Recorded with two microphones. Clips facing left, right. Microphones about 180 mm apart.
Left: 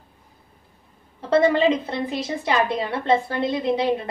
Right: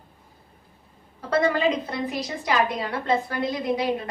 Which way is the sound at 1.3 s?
25° left (ahead or behind).